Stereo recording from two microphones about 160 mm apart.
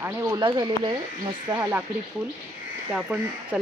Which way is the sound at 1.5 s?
15° right (ahead or behind).